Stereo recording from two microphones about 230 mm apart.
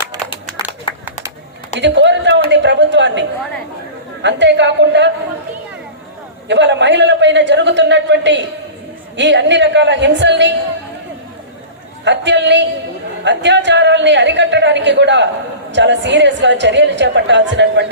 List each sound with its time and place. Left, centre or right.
0.9 s a sound: left
1.7 s a woman's voice: right
6.5 s a woman's voice: right
12.0 s a woman's voice: right